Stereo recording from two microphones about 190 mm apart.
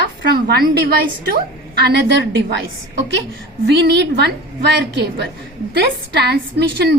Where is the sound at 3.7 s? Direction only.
65° right (ahead or behind).